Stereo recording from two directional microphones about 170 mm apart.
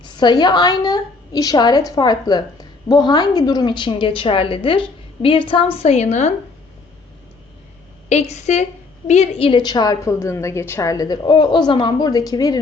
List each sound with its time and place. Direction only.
0.0 s a woman's voice: 25° left (ahead or behind); by 6.3 s 40° left (ahead or behind)
8.1 s a woman's voice: 40° left (ahead or behind); by 12.5 s 20° left (ahead or behind)